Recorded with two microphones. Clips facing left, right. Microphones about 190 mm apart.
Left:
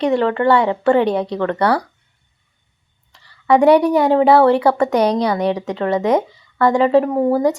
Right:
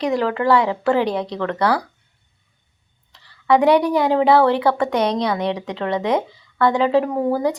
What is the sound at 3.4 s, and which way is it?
A woman's voice, 10° left (ahead or behind).